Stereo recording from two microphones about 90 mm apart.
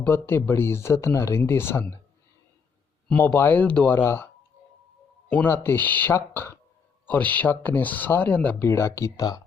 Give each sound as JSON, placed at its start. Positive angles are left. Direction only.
{"t": 0.0, "sound": "speech", "side_deg": 25}
{"t": 3.2, "sound": "speech", "side_deg": 20}
{"t": 5.5, "sound": "speech", "side_deg": 25}
{"t": 8.6, "sound": "speech", "side_deg": 30}